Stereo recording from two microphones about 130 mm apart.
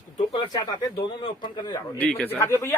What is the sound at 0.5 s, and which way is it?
Speech, 35° left (ahead or behind).